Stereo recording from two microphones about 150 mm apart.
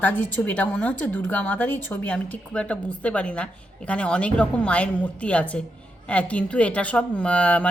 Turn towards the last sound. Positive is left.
turn(degrees=10)  # may be behind; listen again after turning